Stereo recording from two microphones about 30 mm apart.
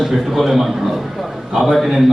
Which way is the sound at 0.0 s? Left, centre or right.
Centre.